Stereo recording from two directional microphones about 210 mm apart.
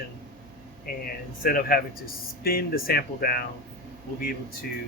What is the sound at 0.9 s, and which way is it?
Speech, 45° left (ahead or behind).